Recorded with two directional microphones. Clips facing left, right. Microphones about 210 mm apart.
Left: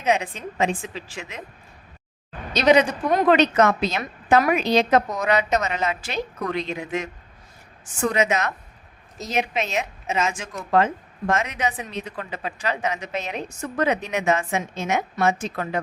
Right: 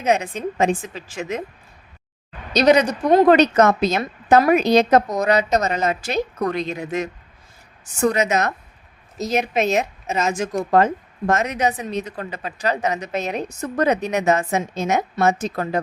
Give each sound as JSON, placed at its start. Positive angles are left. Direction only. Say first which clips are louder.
{"t": 0.0, "sound": "a woman's voice", "louder": "right 3 dB", "side_deg": -40}
{"t": 2.5, "sound": "speech", "louder": "right 2 dB", "side_deg": -40}